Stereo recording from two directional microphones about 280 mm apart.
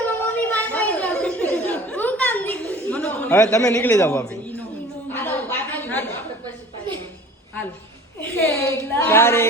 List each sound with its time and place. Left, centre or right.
0.0 s chatter: centre
3.5 s a man's voice: centre
5.1 s a sound: centre
8.5 s a man's voice: centre